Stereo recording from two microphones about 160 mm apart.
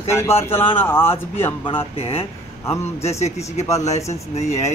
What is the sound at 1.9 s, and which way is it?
Speech, 40° left (ahead or behind).